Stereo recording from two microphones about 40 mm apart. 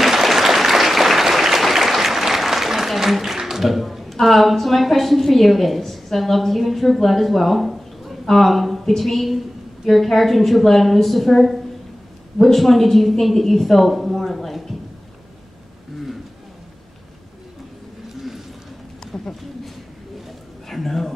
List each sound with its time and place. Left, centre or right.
0.0 s applause: centre
9.8 s a woman's voice: centre
19.1 s a sound: centre
20.6 s speech: centre